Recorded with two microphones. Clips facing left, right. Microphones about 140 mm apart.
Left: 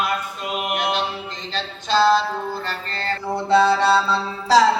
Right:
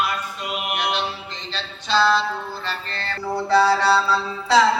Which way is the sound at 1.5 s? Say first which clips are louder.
Left 1 dB; 45° left (ahead or behind).